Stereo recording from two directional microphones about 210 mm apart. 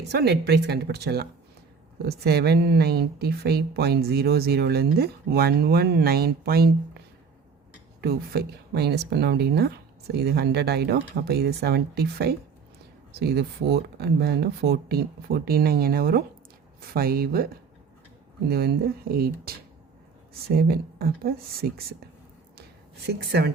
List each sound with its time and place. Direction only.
0.1 s speech: 50° right (ahead or behind)
8.0 s speech: 50° right (ahead or behind)
20.6 s speech: 45° right (ahead or behind)
23.0 s speech: 50° right (ahead or behind)